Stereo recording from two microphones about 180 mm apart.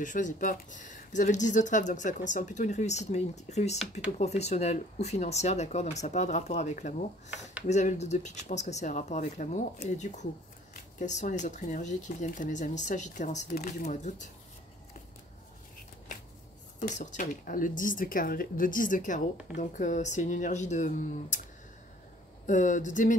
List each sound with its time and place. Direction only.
0.0 s speech: 45° left (ahead or behind)
16.8 s speech: 45° left (ahead or behind)
22.5 s speech: 45° left (ahead or behind)